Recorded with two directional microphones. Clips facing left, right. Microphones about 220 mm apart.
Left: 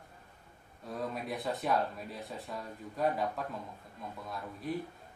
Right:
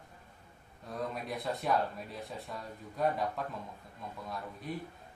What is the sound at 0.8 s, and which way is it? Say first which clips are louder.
Speech: left 1 dB; centre (ahead or behind).